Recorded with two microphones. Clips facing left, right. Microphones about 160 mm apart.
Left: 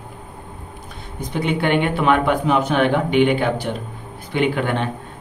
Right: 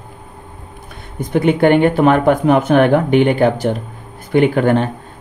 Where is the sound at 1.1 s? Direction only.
50° right (ahead or behind).